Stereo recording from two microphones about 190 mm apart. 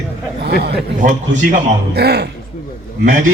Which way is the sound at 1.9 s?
60° right (ahead or behind).